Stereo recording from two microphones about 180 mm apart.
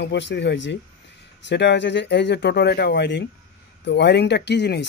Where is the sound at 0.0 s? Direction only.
75° left (ahead or behind).